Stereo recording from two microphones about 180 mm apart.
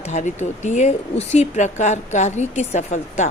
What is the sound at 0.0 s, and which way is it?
A woman's voice, 40° left (ahead or behind).